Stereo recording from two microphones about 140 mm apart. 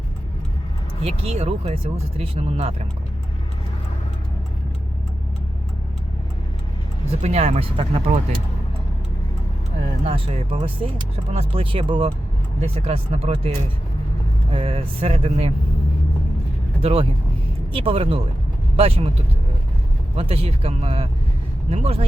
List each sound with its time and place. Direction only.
1.0 s speech: 45° right (ahead or behind)
7.1 s speech: 50° right (ahead or behind)
10.0 s speech: 45° right (ahead or behind)
14.5 s speech: 45° right (ahead or behind)
16.8 s speech: 40° right (ahead or behind)
20.1 s speech: 45° right (ahead or behind)